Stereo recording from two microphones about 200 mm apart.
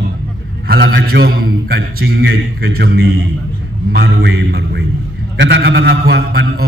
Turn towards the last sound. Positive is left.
turn(degrees=-55)  # may be behind; listen again after turning